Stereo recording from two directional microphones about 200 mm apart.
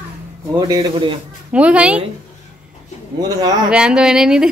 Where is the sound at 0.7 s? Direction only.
25° right (ahead or behind).